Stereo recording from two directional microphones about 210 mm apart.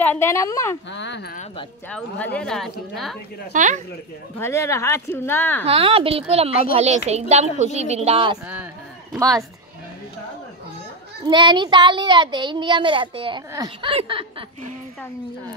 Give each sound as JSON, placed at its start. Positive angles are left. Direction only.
{"t": 0.0, "sound": "speech", "side_deg": 10}
{"t": 0.9, "sound": "a sound", "side_deg": 55}
{"t": 1.9, "sound": "speech", "side_deg": 5}
{"t": 3.5, "sound": "a woman's voice", "side_deg": -35}
{"t": 4.4, "sound": "speech", "side_deg": 10}
{"t": 5.7, "sound": "a woman's voice", "side_deg": -25}
{"t": 9.1, "sound": "speech", "side_deg": -15}
{"t": 11.2, "sound": "speech", "side_deg": -20}